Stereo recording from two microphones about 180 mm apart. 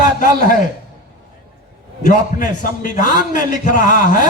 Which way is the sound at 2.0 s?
50° left (ahead or behind).